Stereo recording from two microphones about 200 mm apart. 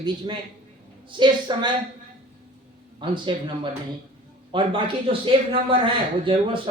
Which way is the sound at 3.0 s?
25° right (ahead or behind).